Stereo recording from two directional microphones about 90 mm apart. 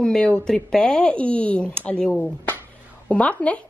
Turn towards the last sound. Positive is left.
turn(degrees=15)  # may be behind; listen again after turning